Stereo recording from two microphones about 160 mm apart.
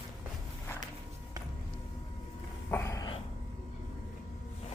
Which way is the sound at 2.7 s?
15° left (ahead or behind).